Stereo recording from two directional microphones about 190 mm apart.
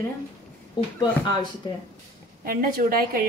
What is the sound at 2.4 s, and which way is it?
Speech, 50° right (ahead or behind).